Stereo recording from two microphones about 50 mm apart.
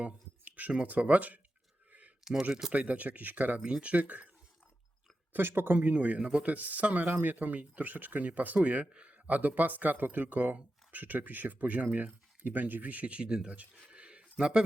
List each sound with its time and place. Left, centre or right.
0.0 s a sound: right
0.7 s speech: right
1.9 s a sound: right
2.4 s speech: centre
2.7 s speech: right
3.6 s speech: right
5.3 s speech: right
5.9 s speech: right
13.9 s a sound: right